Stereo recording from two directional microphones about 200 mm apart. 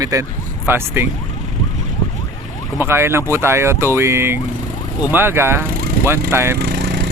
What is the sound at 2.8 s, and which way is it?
Speech, 10° right (ahead or behind).